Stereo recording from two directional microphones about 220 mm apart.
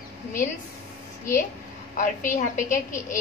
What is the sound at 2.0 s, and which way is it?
Speech, 35° left (ahead or behind).